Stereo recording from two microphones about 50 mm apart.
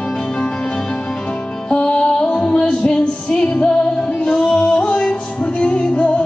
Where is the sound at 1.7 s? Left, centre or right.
Centre.